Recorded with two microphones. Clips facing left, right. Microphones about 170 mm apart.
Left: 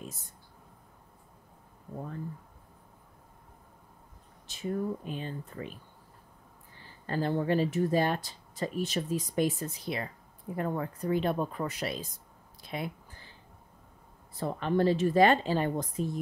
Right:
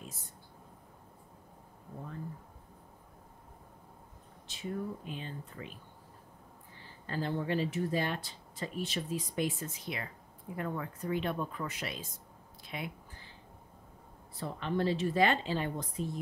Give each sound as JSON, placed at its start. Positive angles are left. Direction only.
{"t": 4.5, "sound": "speech", "side_deg": 45}
{"t": 7.1, "sound": "speech", "side_deg": 45}
{"t": 14.3, "sound": "speech", "side_deg": 45}